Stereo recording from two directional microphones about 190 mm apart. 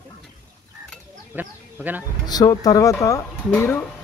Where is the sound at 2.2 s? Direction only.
20° left (ahead or behind).